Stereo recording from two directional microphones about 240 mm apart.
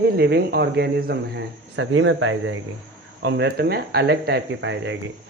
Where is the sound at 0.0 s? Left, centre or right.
Right.